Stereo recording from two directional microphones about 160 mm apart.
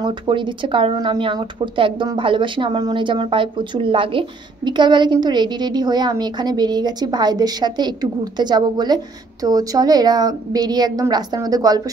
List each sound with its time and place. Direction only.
0.0 s speech: 30° right (ahead or behind)